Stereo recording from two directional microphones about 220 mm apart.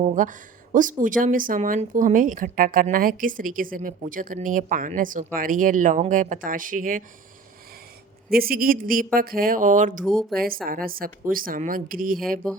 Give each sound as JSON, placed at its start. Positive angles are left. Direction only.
{"t": 0.0, "sound": "speech", "side_deg": -35}
{"t": 8.3, "sound": "speech", "side_deg": -40}
{"t": 10.0, "sound": "speech", "side_deg": 0}
{"t": 10.3, "sound": "speech", "side_deg": -40}